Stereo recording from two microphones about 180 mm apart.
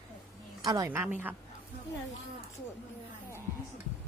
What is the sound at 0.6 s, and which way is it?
Speech, 20° right (ahead or behind).